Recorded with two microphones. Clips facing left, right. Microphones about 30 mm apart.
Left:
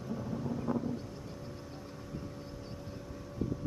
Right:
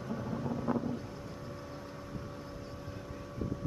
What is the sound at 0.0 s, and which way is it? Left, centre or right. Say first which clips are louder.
Wind noise: right 1 dB; centre.